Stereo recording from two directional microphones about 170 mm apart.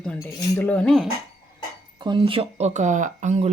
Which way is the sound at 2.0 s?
30° right (ahead or behind).